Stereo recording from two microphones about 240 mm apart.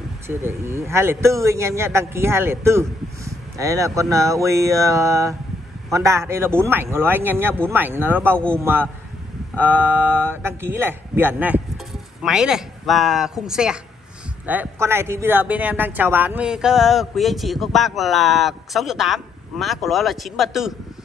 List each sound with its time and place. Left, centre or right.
0.3 s a man's voice: centre